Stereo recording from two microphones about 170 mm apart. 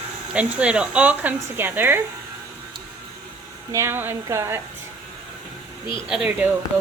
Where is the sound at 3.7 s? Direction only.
15° right (ahead or behind).